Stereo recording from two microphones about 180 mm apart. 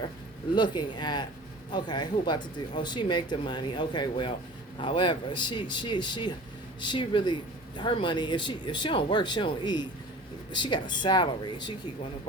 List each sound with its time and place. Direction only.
0.5 s speech: 25° left (ahead or behind)